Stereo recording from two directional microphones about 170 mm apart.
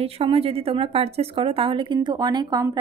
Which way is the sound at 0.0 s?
35° right (ahead or behind).